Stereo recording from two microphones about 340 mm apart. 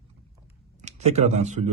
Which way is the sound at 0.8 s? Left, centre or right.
Centre.